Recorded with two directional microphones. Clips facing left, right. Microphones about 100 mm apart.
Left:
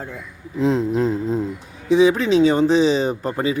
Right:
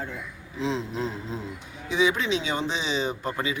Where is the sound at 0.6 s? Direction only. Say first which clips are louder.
Left 10 dB; 45° left (ahead or behind).